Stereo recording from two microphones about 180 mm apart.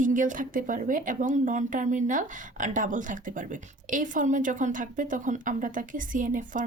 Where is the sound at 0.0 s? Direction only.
45° right (ahead or behind).